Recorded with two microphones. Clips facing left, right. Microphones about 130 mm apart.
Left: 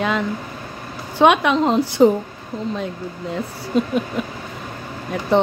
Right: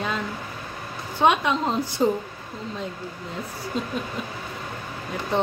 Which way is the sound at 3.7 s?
70° left (ahead or behind).